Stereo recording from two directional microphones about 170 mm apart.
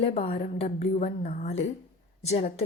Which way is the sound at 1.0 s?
45° left (ahead or behind).